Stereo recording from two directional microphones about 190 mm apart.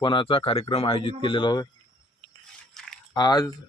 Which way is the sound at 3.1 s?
20° left (ahead or behind).